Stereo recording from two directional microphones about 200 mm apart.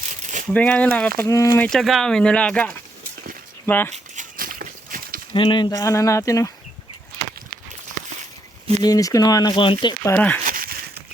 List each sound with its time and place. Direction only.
0.2 s a sound: 40° right (ahead or behind)
0.5 s speech: 5° left (ahead or behind)
3.9 s dog: 40° right (ahead or behind)
5.3 s speech: 25° left (ahead or behind)
8.8 s speech: 20° left (ahead or behind)
10.0 s speech: 10° left (ahead or behind)
10.4 s a sound: 45° right (ahead or behind)